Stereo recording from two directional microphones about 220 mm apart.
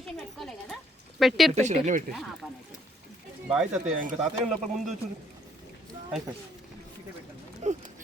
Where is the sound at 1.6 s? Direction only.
30° right (ahead or behind).